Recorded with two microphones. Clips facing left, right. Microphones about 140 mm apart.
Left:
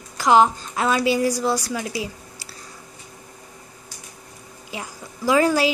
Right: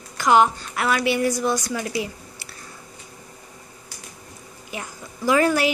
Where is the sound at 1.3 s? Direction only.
35° left (ahead or behind).